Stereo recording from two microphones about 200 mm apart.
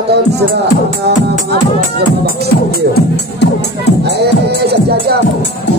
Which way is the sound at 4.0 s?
55° right (ahead or behind).